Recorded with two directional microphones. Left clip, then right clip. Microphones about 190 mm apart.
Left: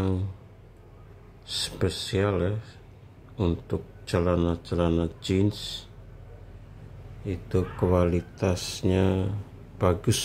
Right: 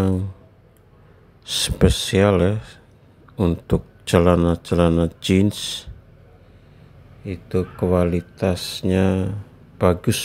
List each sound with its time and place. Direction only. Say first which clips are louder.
0.0 s a sound: right 7 dB; 20° right (ahead or behind)
1.4 s speech: right 9 dB; 30° right (ahead or behind)
7.2 s speech: right 4 dB; 15° right (ahead or behind)